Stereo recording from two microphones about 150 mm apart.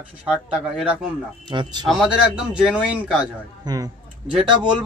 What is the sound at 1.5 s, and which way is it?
Speech, 30° right (ahead or behind).